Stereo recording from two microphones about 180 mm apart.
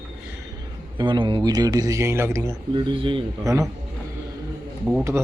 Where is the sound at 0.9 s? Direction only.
25° right (ahead or behind).